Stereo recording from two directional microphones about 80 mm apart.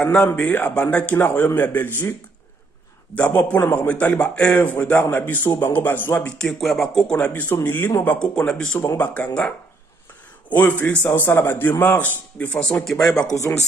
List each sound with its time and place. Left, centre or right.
0.0 s a man's voice: centre
3.2 s a man's voice: centre
6.3 s a man's voice: centre
7.6 s a man's voice: left; by 8.7 s centre
8.9 s a man's voice: left
10.5 s a man's voice: left
11.1 s a man's voice: left
12.0 s a man's voice: centre
13.2 s speech: left